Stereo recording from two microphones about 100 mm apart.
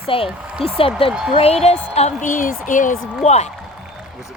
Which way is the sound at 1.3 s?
80° left.